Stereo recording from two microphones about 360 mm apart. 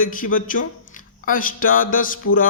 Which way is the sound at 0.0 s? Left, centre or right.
Left.